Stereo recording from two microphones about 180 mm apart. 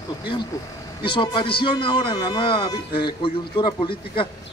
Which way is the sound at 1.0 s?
25° left (ahead or behind).